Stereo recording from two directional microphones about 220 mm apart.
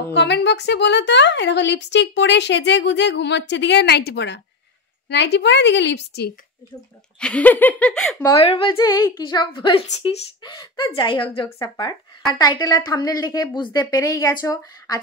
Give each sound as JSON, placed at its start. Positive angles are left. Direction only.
{"t": 0.1, "sound": "a woman's voice", "side_deg": 50}
{"t": 7.2, "sound": "a woman's voice", "side_deg": 5}
{"t": 8.4, "sound": "a woman's voice", "side_deg": 25}